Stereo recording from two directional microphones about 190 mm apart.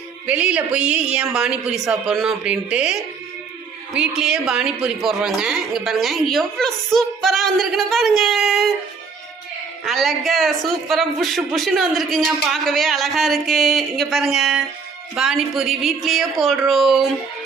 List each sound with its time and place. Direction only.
0.3 s a woman's voice: 5° right (ahead or behind)
9.8 s a woman's voice: centre (ahead or behind)